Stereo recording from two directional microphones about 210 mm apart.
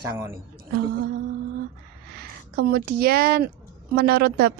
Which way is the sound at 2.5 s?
50° right (ahead or behind).